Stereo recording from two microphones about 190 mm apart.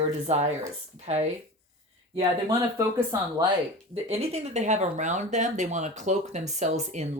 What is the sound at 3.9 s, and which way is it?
Speech, 35° right (ahead or behind).